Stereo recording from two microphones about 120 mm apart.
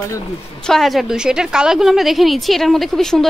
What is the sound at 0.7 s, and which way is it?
A woman's voice, centre (ahead or behind).